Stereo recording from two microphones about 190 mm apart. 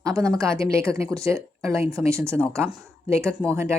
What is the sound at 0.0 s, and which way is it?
Speech, 15° right (ahead or behind).